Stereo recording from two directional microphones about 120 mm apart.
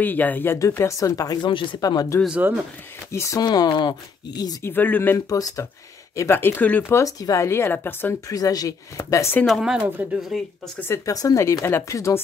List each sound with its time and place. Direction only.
0.0 s speech: 15° left (ahead or behind); by 2.1 s 30° left (ahead or behind)
2.2 s speech: 10° right (ahead or behind)
3.1 s speech: 25° left (ahead or behind)
4.6 s speech: 15° left (ahead or behind)
5.3 s speech: 30° left (ahead or behind)
8.3 s speech: 30° left (ahead or behind)
9.4 s speech: centre (ahead or behind)
10.8 s speech: 25° left (ahead or behind)